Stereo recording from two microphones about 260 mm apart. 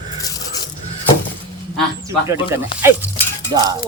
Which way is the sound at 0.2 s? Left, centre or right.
Centre.